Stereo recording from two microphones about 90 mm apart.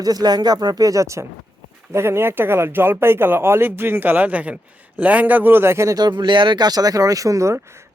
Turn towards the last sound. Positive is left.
turn(degrees=-35)  # may be behind; listen again after turning